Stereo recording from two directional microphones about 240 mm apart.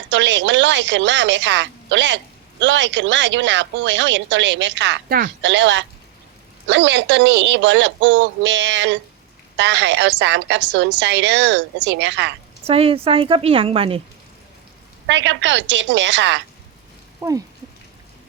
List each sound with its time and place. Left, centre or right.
0.1 s a woman's voice: right
12.6 s a woman's voice: right
15.0 s a woman's voice: right
17.2 s speech: centre